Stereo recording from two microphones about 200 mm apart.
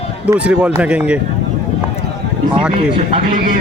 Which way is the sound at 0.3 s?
5° right (ahead or behind).